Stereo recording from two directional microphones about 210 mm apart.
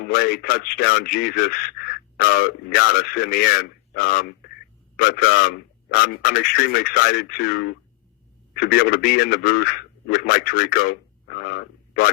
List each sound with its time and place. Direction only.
0.1 s a man's voice: 45° left (ahead or behind)